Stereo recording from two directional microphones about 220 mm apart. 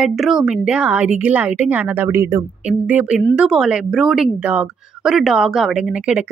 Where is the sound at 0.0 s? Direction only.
Centre (ahead or behind).